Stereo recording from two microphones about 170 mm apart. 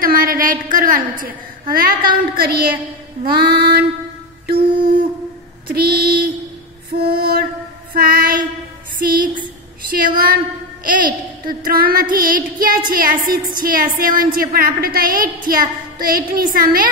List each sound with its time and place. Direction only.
0.0 s female singing: 55° right (ahead or behind)
5.7 s female singing: 60° right (ahead or behind)
7.0 s lullaby: 65° right (ahead or behind)
7.9 s child singing: 60° right (ahead or behind)
9.0 s a woman's voice: 55° right (ahead or behind)
11.4 s female singing: 60° right (ahead or behind)